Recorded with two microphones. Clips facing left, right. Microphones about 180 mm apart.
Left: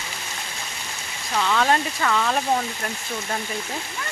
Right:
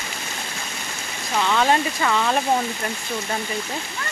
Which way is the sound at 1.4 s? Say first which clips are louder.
Right 1 dB; 5° right (ahead or behind).